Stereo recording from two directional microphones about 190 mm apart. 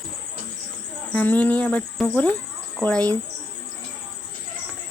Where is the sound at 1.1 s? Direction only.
10° left (ahead or behind).